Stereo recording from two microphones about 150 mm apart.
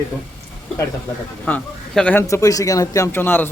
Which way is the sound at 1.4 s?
10° left (ahead or behind).